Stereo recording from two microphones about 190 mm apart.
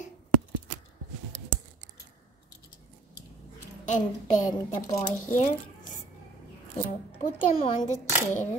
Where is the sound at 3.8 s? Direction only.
40° left (ahead or behind).